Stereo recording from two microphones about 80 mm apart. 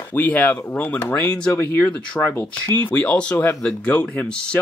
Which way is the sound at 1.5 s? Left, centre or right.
Left.